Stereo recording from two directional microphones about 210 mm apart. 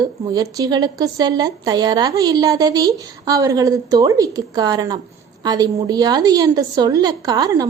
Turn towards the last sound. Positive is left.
turn(degrees=-20)  # may be behind; listen again after turning